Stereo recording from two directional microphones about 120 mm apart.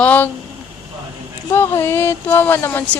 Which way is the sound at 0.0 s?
15° left (ahead or behind).